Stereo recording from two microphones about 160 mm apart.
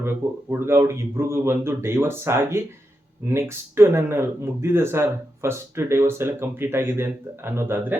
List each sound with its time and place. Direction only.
0.0 s speech: 15° right (ahead or behind)